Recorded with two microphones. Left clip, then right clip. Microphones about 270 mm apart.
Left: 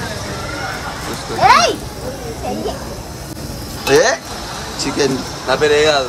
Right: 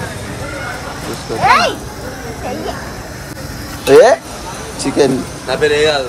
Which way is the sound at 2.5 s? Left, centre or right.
Centre.